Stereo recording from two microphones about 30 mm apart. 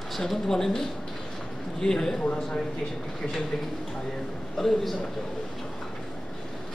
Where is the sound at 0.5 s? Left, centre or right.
Centre.